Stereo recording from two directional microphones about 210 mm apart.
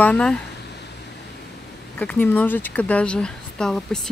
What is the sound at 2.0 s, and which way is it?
Speech, 10° left (ahead or behind).